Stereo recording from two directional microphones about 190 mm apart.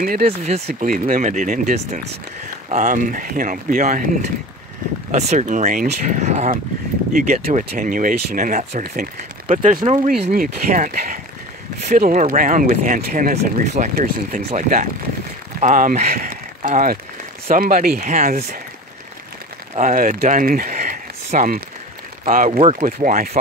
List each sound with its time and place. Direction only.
0.0 s speech: 50° right (ahead or behind)
0.4 s speech: 35° right (ahead or behind)
19.7 s speech: 45° right (ahead or behind)
22.6 s speech: 30° right (ahead or behind)
23.0 s speech: 45° right (ahead or behind)